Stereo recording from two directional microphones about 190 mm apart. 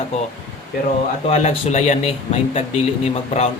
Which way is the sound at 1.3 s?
35° left (ahead or behind).